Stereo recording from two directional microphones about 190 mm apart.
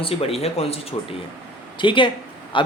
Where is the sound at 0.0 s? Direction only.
30° left (ahead or behind).